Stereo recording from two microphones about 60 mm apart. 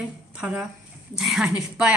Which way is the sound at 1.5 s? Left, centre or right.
Centre.